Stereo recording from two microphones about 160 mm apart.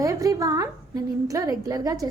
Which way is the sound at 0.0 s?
20° right (ahead or behind).